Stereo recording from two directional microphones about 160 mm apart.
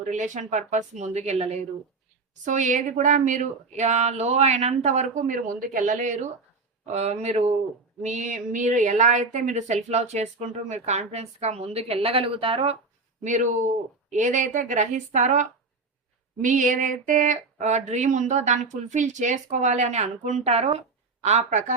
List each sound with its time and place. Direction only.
0.1 s a woman's voice: 50° right (ahead or behind)
13.2 s speech: 50° right (ahead or behind)